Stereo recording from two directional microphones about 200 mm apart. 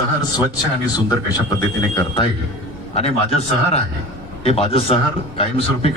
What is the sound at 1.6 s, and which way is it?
Speech, 20° left (ahead or behind).